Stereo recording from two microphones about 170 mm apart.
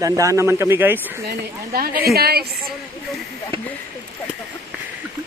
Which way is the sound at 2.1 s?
65° right (ahead or behind).